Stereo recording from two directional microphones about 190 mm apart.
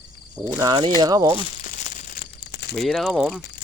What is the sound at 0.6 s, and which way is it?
Speech, 20° right (ahead or behind).